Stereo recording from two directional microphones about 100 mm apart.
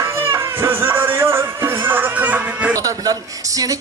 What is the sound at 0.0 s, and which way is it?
Music, 25° right (ahead or behind).